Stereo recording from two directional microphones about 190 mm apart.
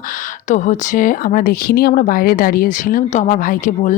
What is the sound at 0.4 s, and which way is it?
Speech, 40° left (ahead or behind).